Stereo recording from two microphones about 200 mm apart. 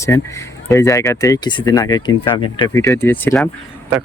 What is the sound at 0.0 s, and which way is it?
Speech, 15° left (ahead or behind).